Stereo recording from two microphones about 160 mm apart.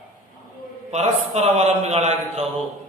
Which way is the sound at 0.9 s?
45° right (ahead or behind).